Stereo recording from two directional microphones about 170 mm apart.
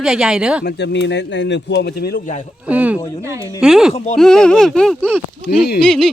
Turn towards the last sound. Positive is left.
turn(degrees=5)  # may be behind; listen again after turning